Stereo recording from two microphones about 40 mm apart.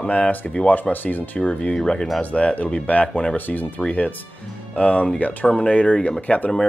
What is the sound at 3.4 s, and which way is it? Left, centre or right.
Speech, left.